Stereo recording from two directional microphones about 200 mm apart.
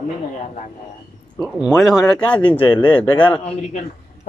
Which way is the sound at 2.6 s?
25° left (ahead or behind).